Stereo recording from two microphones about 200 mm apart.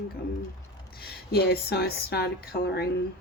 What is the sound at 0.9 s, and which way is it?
Speech, 50° left (ahead or behind).